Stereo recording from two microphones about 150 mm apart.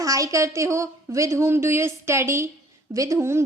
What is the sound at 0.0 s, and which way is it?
A woman's voice, 20° right (ahead or behind).